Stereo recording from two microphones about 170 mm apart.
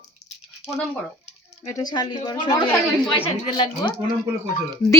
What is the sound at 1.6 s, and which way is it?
A woman's voice, 20° left (ahead or behind).